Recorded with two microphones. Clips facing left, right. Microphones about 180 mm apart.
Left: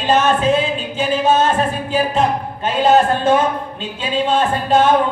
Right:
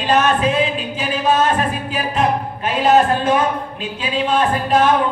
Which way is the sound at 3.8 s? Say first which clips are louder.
Left 2 dB; 25° left (ahead or behind).